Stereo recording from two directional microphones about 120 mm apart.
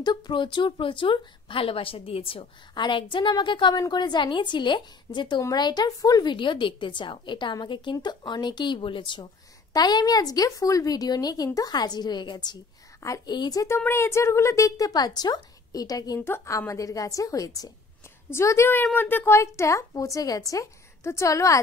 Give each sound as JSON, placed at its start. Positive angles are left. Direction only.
{"t": 0.0, "sound": "a woman's voice", "side_deg": 40}
{"t": 16.2, "sound": "a woman's voice", "side_deg": 20}